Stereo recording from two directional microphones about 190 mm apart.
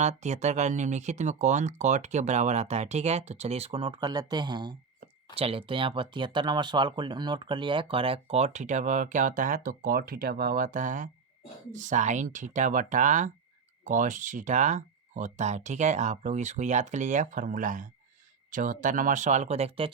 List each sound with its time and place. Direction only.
0.0 s speech: 35° right (ahead or behind)